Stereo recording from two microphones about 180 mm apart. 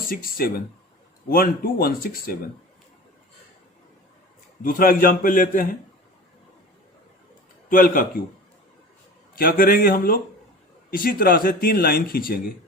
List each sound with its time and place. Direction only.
0.1 s speech: 55° left (ahead or behind)
4.6 s speech: 50° left (ahead or behind)
7.7 s speech: 50° left (ahead or behind)
9.3 s speech: 55° left (ahead or behind)